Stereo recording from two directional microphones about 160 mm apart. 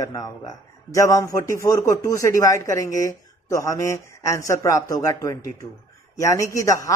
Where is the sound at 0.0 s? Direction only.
20° left (ahead or behind).